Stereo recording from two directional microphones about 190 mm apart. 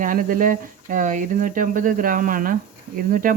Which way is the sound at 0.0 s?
45° right (ahead or behind).